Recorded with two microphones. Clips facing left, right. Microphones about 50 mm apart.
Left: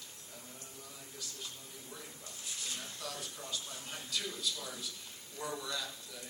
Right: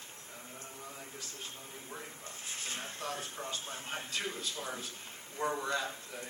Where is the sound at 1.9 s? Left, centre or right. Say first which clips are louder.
Right 4 dB; right.